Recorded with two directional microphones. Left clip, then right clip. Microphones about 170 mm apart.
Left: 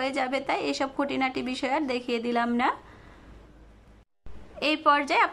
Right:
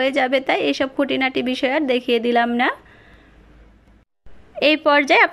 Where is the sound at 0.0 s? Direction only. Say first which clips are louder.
Right 10 dB; 15° right (ahead or behind).